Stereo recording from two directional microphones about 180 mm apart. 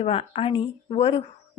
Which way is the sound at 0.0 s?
30° left (ahead or behind).